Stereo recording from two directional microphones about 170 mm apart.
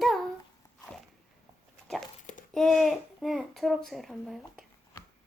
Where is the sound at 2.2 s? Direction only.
50° left (ahead or behind).